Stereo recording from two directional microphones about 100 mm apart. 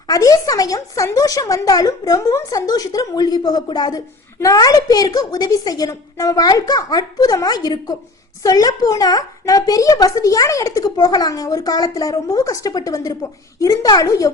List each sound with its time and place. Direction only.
0.1 s speech: 35° left (ahead or behind)